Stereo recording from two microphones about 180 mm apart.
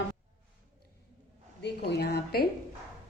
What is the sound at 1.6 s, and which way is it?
Speech, 70° left (ahead or behind).